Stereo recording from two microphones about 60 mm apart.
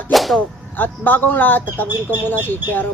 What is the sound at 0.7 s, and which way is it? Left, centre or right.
Speech, left.